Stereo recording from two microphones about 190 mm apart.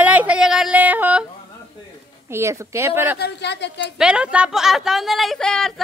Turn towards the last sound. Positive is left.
turn(degrees=0)  # may be behind; listen again after turning